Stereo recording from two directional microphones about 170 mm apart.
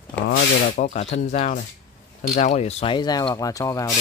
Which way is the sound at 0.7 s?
45° left (ahead or behind).